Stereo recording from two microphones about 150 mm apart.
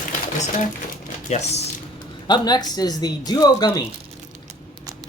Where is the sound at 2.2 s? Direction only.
30° left (ahead or behind).